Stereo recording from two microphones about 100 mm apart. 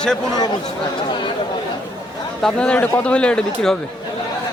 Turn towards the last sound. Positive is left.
turn(degrees=10)  # may be behind; listen again after turning